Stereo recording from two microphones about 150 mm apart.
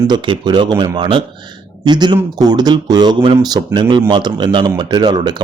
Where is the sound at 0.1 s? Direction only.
30° right (ahead or behind).